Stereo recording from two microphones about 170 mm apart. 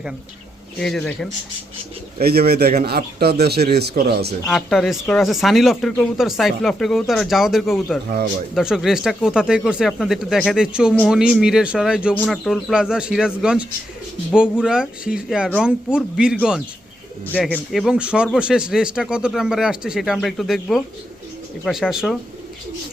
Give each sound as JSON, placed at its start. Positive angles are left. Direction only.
{"t": 0.8, "sound": "speech", "side_deg": 5}
{"t": 2.2, "sound": "speech", "side_deg": -65}
{"t": 4.4, "sound": "speech", "side_deg": 0}